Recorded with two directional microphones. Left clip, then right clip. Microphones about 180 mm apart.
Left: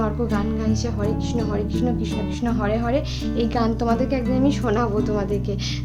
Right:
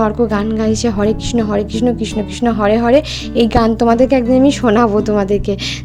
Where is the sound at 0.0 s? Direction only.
45° right (ahead or behind).